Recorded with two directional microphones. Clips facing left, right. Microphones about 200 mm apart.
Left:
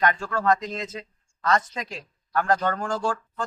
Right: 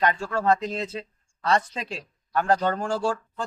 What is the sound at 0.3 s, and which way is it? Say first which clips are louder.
A man's voice: right 1 dB; 25° right (ahead or behind).